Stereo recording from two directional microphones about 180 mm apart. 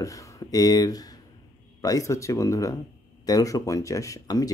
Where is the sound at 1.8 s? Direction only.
20° left (ahead or behind).